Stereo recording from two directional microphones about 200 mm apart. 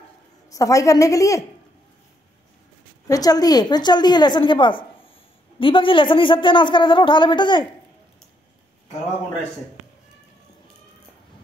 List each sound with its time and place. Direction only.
0.5 s a woman's voice: 15° left (ahead or behind)
3.1 s a woman's voice: 20° left (ahead or behind)